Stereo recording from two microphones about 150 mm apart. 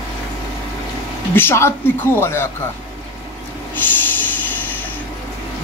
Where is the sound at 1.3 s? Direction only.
15° left (ahead or behind).